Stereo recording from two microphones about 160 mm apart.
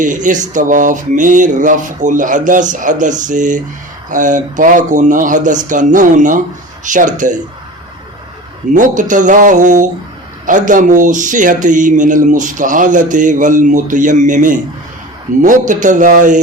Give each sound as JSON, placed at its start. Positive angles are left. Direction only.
{"t": 0.0, "sound": "speech", "side_deg": -50}
{"t": 8.7, "sound": "speech", "side_deg": -50}